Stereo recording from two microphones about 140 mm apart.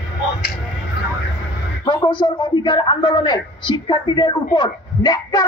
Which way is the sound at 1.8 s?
35° left (ahead or behind).